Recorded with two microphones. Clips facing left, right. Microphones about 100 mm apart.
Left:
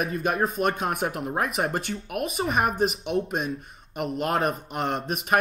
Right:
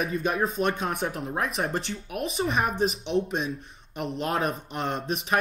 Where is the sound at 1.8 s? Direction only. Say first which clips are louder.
Left 2 dB; 55° left (ahead or behind).